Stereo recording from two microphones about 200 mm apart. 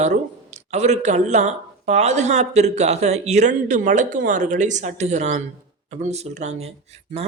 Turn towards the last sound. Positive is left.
turn(degrees=-30)  # may be behind; listen again after turning